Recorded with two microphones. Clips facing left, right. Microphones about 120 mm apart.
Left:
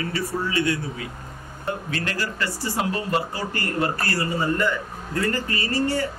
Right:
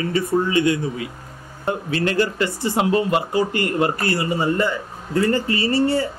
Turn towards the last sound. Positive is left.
turn(degrees=-25)  # may be behind; listen again after turning